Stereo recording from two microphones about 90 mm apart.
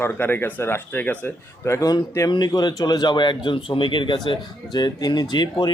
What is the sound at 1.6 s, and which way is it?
Speech, 30° left (ahead or behind).